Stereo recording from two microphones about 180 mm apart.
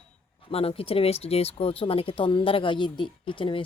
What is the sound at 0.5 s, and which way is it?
Speech, 30° left (ahead or behind).